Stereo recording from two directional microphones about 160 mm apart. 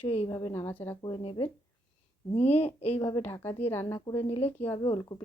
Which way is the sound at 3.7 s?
15° left (ahead or behind).